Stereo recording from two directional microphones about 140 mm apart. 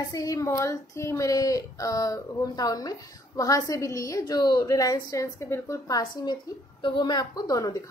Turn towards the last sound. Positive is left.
turn(degrees=25)  # may be behind; listen again after turning